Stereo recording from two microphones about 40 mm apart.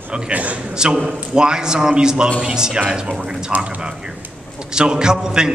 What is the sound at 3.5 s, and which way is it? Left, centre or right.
Speech, right.